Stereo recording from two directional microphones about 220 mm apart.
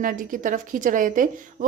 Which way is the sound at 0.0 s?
35° right (ahead or behind).